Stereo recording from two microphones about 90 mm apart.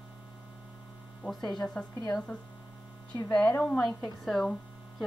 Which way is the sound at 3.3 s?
15° left (ahead or behind).